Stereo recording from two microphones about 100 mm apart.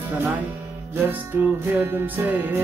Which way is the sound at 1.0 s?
20° right (ahead or behind).